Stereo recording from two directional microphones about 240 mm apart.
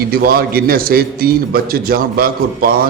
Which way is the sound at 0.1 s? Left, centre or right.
Right.